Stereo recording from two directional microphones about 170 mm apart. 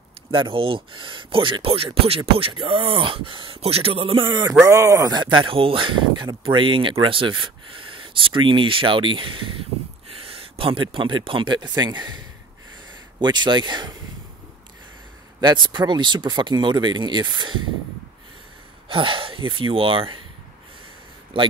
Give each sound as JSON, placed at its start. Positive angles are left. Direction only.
{"t": 0.3, "sound": "speech", "side_deg": -30}
{"t": 15.4, "sound": "speech", "side_deg": -25}
{"t": 18.9, "sound": "speech", "side_deg": -30}
{"t": 21.3, "sound": "speech", "side_deg": -30}